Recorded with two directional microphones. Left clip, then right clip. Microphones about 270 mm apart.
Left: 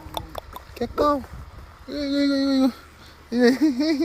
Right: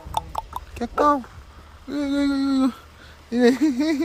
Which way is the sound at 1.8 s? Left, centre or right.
Centre.